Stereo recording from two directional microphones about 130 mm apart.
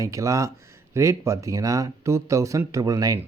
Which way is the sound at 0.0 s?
25° right (ahead or behind).